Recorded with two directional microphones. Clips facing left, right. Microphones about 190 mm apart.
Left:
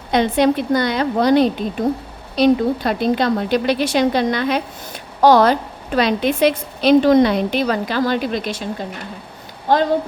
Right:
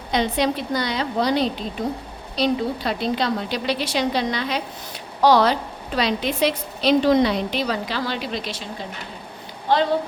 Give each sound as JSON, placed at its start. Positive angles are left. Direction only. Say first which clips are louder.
{"t": 0.1, "sound": "a woman's voice", "louder": "left 6 dB", "side_deg": 55}
{"t": 9.7, "sound": "a woman's voice", "louder": "left 3 dB", "side_deg": 45}